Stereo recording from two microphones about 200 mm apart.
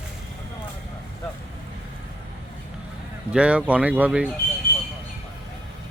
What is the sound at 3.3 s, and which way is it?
Speech, 5° right (ahead or behind).